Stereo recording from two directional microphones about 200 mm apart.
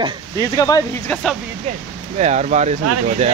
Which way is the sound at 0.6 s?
15° left (ahead or behind).